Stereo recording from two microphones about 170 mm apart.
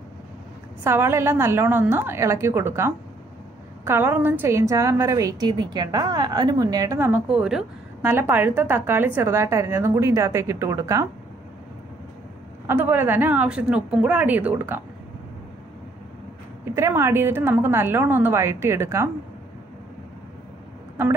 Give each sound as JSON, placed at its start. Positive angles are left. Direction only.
{"t": 0.8, "sound": "a woman's voice", "side_deg": -15}
{"t": 12.6, "sound": "a woman's voice", "side_deg": -10}
{"t": 16.7, "sound": "a woman's voice", "side_deg": -15}